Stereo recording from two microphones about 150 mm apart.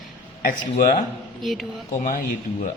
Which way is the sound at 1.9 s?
55° left (ahead or behind).